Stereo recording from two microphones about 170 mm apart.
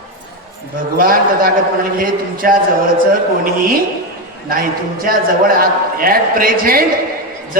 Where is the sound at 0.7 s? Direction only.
55° right (ahead or behind).